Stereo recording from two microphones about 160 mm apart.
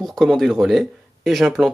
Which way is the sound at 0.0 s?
Centre (ahead or behind).